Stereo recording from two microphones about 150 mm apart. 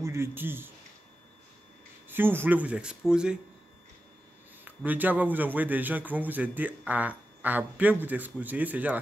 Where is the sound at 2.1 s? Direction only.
15° right (ahead or behind).